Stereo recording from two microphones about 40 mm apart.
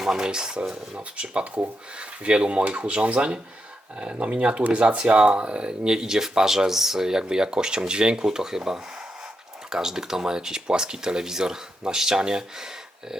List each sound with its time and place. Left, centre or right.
0.0 s speech: centre
0.9 s speech: right